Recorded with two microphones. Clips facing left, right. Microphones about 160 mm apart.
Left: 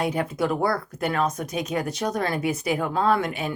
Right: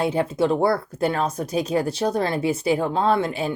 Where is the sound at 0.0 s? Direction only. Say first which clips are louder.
Right 4 dB; 30° right (ahead or behind).